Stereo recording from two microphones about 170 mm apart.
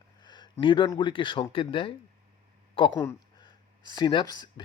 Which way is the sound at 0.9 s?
30° left (ahead or behind).